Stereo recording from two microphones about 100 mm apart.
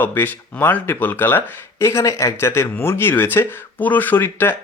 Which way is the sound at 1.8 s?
30° left (ahead or behind).